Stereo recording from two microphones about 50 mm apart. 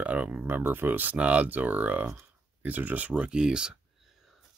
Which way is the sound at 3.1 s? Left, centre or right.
Centre.